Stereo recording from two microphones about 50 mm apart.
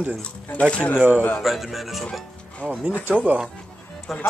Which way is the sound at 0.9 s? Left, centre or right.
Right.